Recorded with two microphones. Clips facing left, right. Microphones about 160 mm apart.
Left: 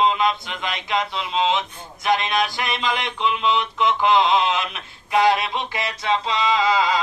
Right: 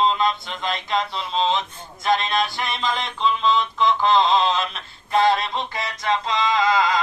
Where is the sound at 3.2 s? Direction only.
15° left (ahead or behind).